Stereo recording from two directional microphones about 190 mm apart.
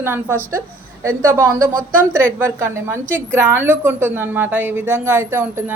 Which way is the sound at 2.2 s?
15° right (ahead or behind).